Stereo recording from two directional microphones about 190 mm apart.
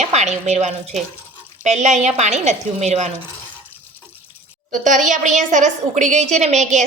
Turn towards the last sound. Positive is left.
turn(degrees=-35)  # may be behind; listen again after turning